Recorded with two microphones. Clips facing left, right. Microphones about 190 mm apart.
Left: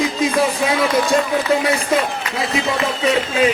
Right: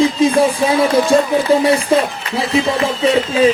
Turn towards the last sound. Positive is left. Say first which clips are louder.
# right 4 dB
turn(degrees=-30)  # may be behind; listen again after turning